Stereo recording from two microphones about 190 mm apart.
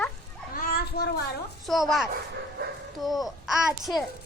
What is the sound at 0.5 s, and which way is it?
Speech, 55° left (ahead or behind).